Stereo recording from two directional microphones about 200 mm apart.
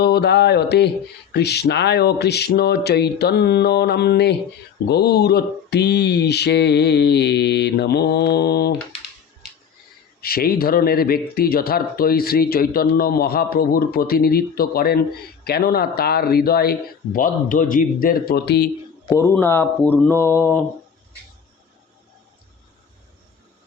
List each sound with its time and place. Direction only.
0.0 s speech: 55° left (ahead or behind)
10.2 s speech: 50° left (ahead or behind)
19.0 s speech: 15° left (ahead or behind)